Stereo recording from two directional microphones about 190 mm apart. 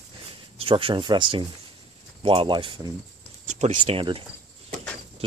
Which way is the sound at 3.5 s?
35° right (ahead or behind).